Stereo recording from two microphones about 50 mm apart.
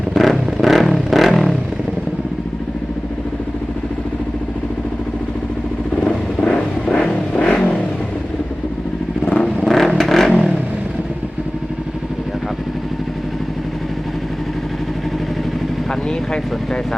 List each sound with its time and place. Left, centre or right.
0.1 s vehicle: centre
6.5 s vehicle: centre
9.2 s vehicle: left
9.6 s vehicle: centre
16.0 s vehicle: centre